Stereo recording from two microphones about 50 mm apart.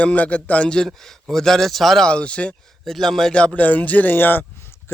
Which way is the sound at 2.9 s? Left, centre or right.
Centre.